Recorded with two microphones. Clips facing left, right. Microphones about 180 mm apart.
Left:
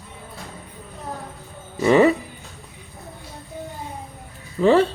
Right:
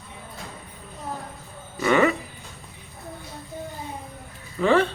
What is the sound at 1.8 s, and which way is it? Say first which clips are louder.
Speech: left 5 dB; 30° left (ahead or behind).